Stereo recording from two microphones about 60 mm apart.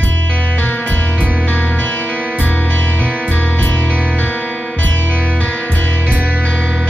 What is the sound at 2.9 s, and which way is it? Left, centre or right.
Music, right.